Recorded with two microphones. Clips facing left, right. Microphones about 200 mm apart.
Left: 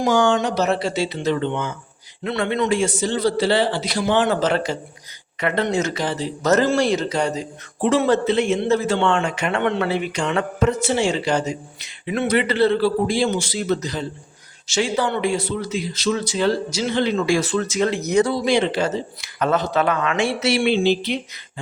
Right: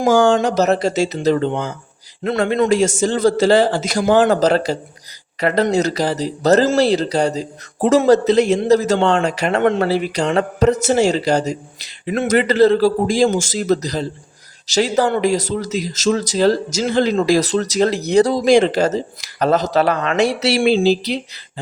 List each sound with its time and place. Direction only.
0.0 s a man's voice: 45° right (ahead or behind)